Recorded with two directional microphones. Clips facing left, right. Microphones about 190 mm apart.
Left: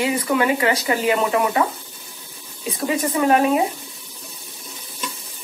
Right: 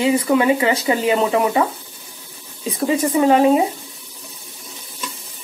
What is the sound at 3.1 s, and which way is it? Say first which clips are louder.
Speech: right 4 dB; 25° right (ahead or behind).